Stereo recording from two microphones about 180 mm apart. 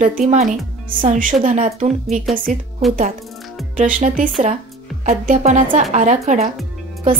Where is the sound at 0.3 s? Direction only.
40° right (ahead or behind).